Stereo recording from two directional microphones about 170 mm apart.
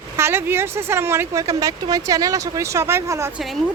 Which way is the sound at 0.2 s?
15° right (ahead or behind).